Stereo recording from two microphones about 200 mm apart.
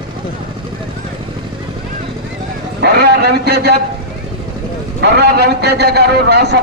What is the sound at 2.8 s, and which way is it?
Speech, 55° right (ahead or behind).